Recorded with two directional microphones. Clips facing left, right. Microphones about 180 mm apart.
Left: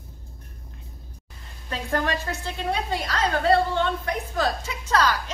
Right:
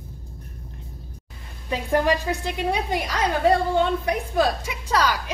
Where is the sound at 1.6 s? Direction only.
10° right (ahead or behind).